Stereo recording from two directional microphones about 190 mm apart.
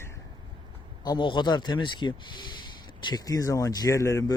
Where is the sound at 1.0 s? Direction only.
25° left (ahead or behind).